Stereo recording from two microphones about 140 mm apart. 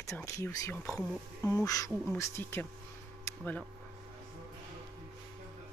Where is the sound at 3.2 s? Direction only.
20° left (ahead or behind).